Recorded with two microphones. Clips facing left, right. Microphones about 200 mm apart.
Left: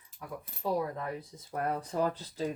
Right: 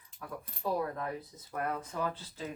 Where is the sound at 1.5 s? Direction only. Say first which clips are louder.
Left 3 dB; 35° left (ahead or behind).